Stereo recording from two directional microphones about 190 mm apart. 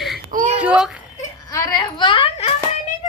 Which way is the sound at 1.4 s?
20° left (ahead or behind).